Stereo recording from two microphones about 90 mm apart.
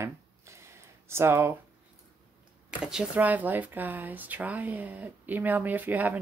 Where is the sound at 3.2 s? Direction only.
20° right (ahead or behind).